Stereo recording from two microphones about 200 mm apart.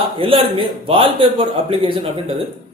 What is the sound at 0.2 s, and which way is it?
A man's voice, 25° right (ahead or behind).